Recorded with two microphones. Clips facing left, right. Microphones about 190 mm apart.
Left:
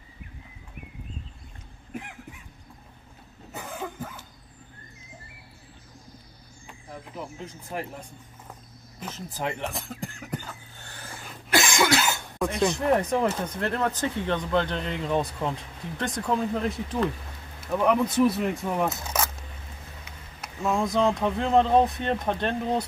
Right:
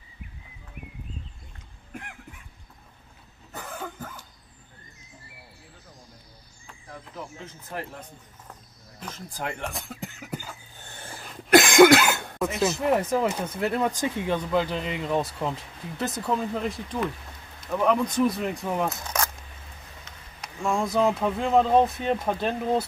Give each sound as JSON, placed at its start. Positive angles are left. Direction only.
{"t": 3.5, "sound": "cough", "side_deg": 10}
{"t": 6.7, "sound": "speech", "side_deg": 10}
{"t": 9.0, "sound": "speech", "side_deg": 5}
{"t": 10.8, "sound": "a sound", "side_deg": -25}
{"t": 11.6, "sound": "cough", "side_deg": -55}
{"t": 12.4, "sound": "speech", "side_deg": -5}